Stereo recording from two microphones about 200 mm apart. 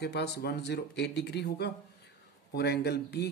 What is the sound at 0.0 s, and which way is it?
Speech, 55° left (ahead or behind).